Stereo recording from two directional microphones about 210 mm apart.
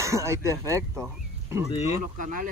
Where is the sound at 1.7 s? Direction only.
30° left (ahead or behind).